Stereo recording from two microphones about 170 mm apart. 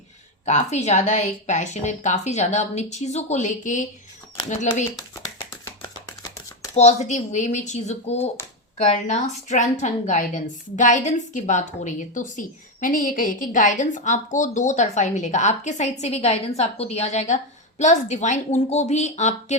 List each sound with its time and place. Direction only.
0.4 s a woman's voice: 40° left (ahead or behind)
6.7 s a woman's voice: 40° left (ahead or behind)